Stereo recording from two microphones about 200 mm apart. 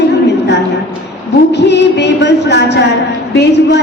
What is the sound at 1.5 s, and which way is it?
A woman's voice, 60° left (ahead or behind).